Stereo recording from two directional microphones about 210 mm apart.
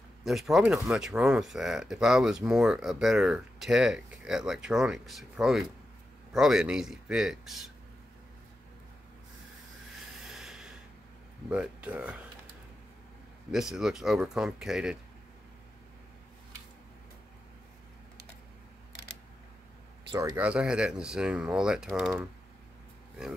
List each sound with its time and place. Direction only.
0.2 s speech: centre (ahead or behind)
10.2 s a sound: centre (ahead or behind)
11.5 s speech: 5° right (ahead or behind)
13.5 s speech: centre (ahead or behind)
20.1 s speech: 20° right (ahead or behind)
20.3 s speech: 5° right (ahead or behind)